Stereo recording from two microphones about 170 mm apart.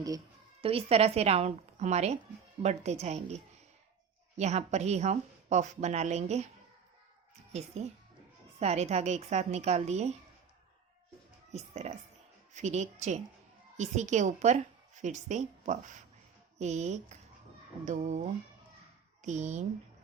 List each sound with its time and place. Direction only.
0.6 s a woman's voice: 35° right (ahead or behind)
8.5 s a woman's voice: 40° right (ahead or behind)
11.5 s a woman's voice: 40° right (ahead or behind)